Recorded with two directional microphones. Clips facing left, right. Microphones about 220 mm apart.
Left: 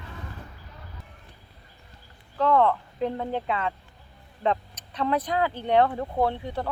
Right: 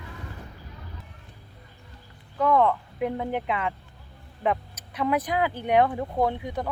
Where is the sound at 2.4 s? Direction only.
10° right (ahead or behind).